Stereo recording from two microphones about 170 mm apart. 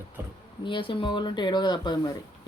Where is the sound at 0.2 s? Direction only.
10° right (ahead or behind).